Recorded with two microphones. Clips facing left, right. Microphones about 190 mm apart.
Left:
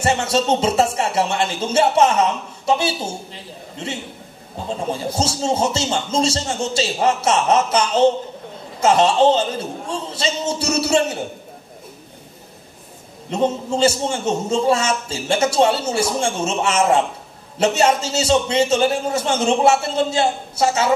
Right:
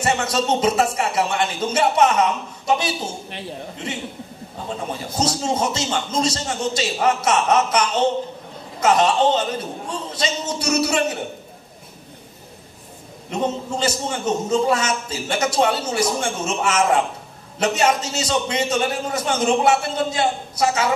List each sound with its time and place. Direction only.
0.0 s speech: 25° left (ahead or behind)
4.6 s speech: 25° left (ahead or behind)
13.3 s speech: 25° left (ahead or behind)